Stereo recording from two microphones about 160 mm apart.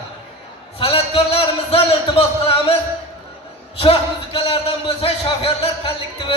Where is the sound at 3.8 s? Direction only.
35° left (ahead or behind).